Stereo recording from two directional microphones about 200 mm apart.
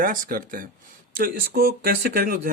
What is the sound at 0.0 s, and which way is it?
Speech, 45° right (ahead or behind).